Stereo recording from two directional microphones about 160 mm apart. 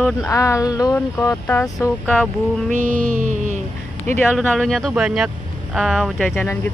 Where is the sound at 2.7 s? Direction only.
50° right (ahead or behind).